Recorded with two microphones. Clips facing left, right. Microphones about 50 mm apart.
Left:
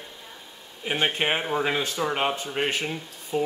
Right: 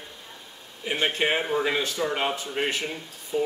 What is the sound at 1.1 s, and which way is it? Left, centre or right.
Speech, left.